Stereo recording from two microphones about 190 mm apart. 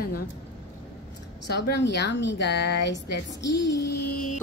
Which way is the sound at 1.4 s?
65° left (ahead or behind).